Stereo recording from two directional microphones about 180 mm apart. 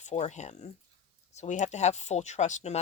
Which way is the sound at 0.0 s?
40° left (ahead or behind).